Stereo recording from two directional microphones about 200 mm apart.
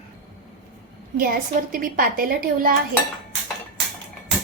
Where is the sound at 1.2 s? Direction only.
45° right (ahead or behind).